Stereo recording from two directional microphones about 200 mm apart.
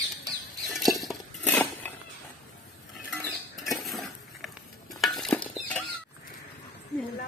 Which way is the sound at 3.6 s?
Centre (ahead or behind).